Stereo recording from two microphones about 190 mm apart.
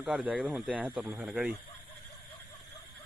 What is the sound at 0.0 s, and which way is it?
Speech, 5° right (ahead or behind).